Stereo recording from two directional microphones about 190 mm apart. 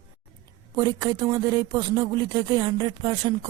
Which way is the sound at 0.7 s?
20° right (ahead or behind).